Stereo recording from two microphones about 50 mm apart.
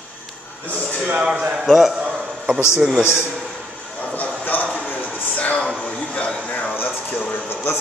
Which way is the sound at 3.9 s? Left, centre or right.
Left.